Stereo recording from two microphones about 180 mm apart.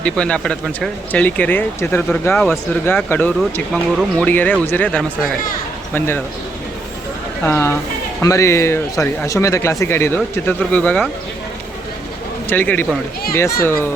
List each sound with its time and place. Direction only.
0.0 s speech: 5° left (ahead or behind)
3.7 s speech: centre (ahead or behind)
4.3 s speech: 10° left (ahead or behind)
7.4 s speech: 10° left (ahead or behind)
12.5 s speech: 10° left (ahead or behind)